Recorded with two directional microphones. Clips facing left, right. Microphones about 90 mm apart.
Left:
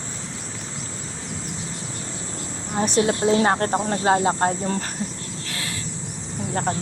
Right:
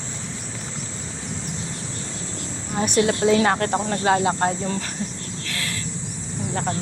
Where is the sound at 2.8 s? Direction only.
30° left (ahead or behind).